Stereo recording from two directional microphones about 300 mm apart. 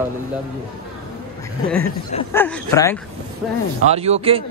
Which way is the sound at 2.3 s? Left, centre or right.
Centre.